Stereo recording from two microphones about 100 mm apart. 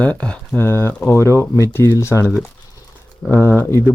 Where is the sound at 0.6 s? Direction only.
20° left (ahead or behind).